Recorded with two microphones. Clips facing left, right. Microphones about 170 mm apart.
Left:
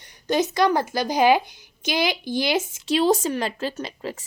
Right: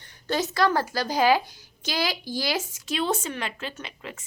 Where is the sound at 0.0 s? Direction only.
15° left (ahead or behind).